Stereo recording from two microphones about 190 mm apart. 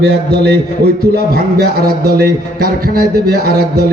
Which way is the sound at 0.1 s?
55° right (ahead or behind).